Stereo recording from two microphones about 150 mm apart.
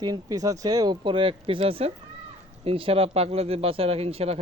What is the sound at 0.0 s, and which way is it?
Speech, 25° right (ahead or behind).